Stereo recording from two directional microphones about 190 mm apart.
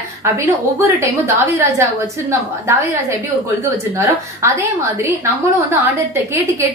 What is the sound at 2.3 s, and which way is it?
Speech, 15° right (ahead or behind).